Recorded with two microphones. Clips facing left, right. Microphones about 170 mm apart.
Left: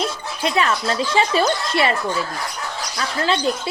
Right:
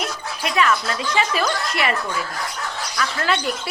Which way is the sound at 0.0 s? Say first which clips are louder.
Left 4 dB; 30° left (ahead or behind).